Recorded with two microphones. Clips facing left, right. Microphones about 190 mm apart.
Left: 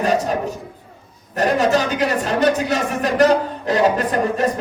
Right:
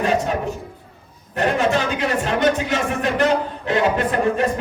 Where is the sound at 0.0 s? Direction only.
40° left (ahead or behind).